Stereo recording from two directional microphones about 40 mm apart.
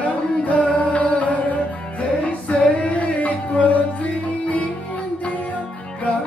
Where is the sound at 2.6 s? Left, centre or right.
Left.